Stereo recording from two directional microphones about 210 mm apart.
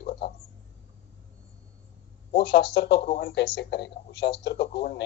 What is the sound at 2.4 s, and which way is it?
A man's voice, 55° left (ahead or behind).